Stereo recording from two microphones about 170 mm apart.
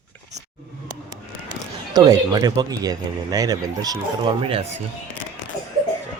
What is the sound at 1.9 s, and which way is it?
Speech, 20° right (ahead or behind).